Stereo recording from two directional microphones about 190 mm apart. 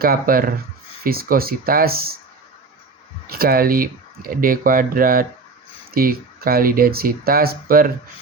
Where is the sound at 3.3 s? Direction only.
50° right (ahead or behind).